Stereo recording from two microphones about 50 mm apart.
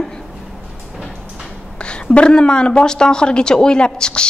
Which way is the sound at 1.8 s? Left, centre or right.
Left.